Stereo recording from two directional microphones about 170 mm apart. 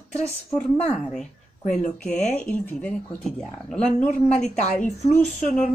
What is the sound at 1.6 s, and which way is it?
Speech, 45° left (ahead or behind).